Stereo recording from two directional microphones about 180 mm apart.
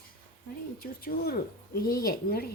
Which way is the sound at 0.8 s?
55° left (ahead or behind).